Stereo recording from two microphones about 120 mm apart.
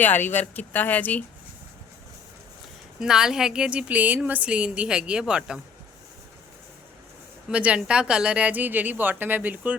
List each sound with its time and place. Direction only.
0.0 s speech: 15° left (ahead or behind)
3.0 s speech: 5° right (ahead or behind)
7.5 s speech: 10° right (ahead or behind)